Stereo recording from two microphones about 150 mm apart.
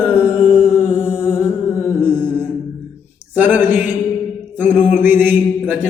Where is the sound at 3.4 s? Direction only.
10° right (ahead or behind).